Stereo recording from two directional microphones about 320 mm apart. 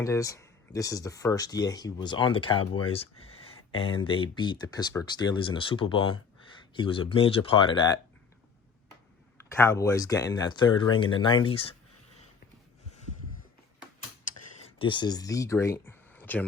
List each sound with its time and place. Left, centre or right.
0.0 s speech: centre
9.5 s speech: centre
14.8 s speech: centre